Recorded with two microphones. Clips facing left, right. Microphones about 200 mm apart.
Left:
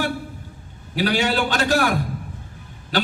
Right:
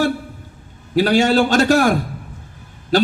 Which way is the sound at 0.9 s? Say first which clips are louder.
Right 7 dB; 45° right (ahead or behind).